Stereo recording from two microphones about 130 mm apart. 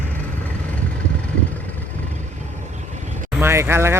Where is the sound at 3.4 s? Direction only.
20° right (ahead or behind).